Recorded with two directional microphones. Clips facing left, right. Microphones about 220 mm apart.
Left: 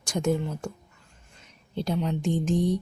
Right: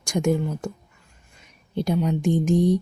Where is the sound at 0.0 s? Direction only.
10° right (ahead or behind).